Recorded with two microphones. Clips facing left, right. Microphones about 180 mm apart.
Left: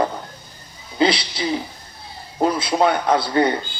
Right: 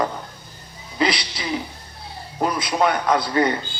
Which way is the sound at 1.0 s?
30° left (ahead or behind).